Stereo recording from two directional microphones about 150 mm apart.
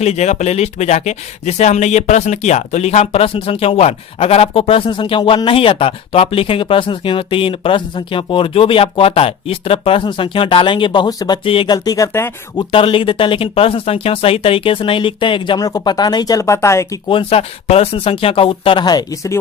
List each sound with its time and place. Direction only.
0.0 s speech: 45° left (ahead or behind); by 12.3 s 20° left (ahead or behind)
12.5 s speech: 35° left (ahead or behind); by 17.0 s 20° left (ahead or behind)
17.1 s speech: 35° left (ahead or behind); by 19.4 s 20° left (ahead or behind)